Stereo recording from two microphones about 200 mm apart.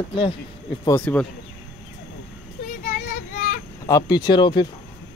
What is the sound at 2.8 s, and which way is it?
Child singing, 40° left (ahead or behind).